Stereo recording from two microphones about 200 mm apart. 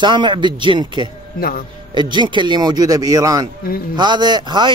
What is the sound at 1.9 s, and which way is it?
Speech, 25° right (ahead or behind).